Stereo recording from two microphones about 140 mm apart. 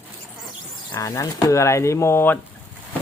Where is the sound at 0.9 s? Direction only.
20° left (ahead or behind).